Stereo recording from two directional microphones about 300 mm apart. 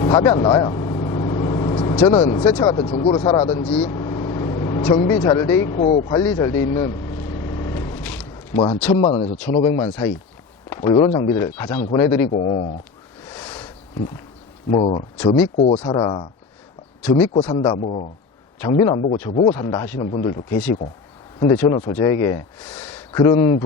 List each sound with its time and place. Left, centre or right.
0.0 s vehicle: centre
8.9 s speech: centre
12.3 s speech: left
13.2 s a sound: centre
14.7 s speech: left; by 23.2 s centre
23.2 s speech: centre